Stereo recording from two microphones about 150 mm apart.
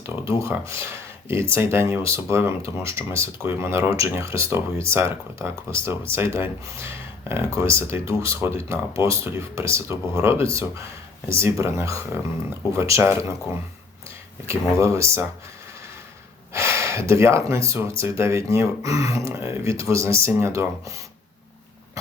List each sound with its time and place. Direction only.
0.3 s speech: 20° right (ahead or behind)
14.8 s speech: 20° right (ahead or behind)
16.5 s gasp: 20° right (ahead or behind)
17.1 s speech: 20° right (ahead or behind)